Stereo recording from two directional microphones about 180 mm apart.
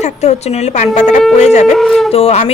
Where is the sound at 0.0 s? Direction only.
35° left (ahead or behind).